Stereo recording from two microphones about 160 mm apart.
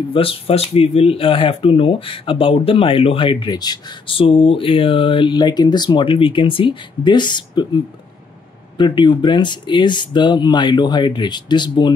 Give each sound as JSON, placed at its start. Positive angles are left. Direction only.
{"t": 0.1, "sound": "speech", "side_deg": 35}
{"t": 8.7, "sound": "speech", "side_deg": 30}